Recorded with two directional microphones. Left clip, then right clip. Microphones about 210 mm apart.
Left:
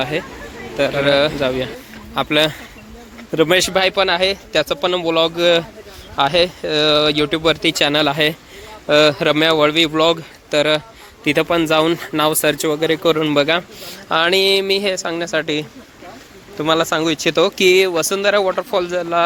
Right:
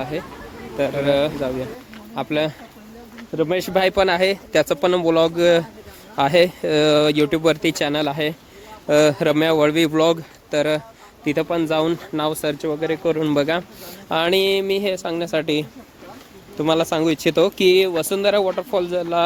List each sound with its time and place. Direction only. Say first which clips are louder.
0.8 s a man's voice: left 4 dB; 5° right (ahead or behind)
3.6 s a man's voice: left 2 dB; 20° right (ahead or behind)
7.9 s speech: left 6 dB; 5° right (ahead or behind)
8.9 s a man's voice: left 3 dB; 20° right (ahead or behind)
10.5 s a man's voice: left 4 dB; 10° right (ahead or behind); by 13.1 s 5° left (ahead or behind)
13.2 s a man's voice: left 4 dB; 15° right (ahead or behind)